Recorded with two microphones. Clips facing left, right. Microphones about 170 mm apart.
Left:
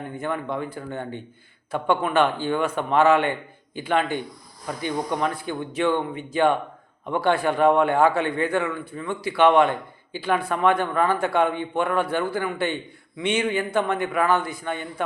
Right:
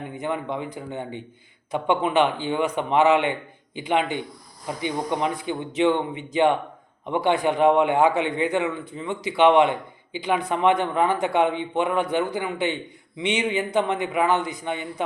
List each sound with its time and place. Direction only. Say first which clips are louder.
0.2 s a man's voice: even; 15° right (ahead or behind)